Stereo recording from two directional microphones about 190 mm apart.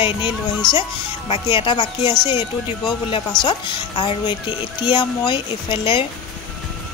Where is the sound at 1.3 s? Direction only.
25° left (ahead or behind).